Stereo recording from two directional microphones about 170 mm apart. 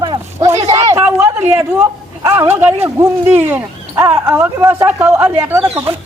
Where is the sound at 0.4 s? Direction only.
40° right (ahead or behind).